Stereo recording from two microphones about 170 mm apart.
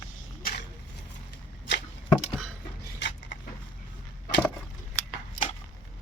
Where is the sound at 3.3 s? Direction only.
90° left.